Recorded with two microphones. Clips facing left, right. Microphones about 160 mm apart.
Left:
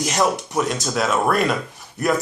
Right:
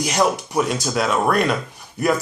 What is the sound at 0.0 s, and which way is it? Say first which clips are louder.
Speech: right 1 dB; centre (ahead or behind).